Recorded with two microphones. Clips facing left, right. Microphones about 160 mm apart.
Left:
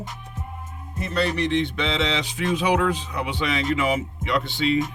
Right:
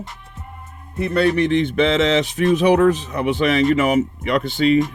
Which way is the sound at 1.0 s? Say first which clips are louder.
Right 7 dB; 55° right (ahead or behind).